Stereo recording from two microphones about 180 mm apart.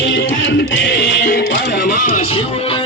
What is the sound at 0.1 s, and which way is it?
Music, 75° left (ahead or behind).